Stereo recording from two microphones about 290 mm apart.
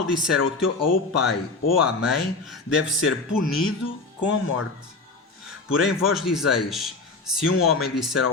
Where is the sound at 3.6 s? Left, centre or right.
Left.